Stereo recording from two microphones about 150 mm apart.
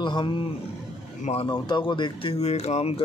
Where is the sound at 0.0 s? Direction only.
30° left (ahead or behind).